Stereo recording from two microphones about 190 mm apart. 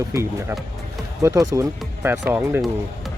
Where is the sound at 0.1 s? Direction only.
15° right (ahead or behind).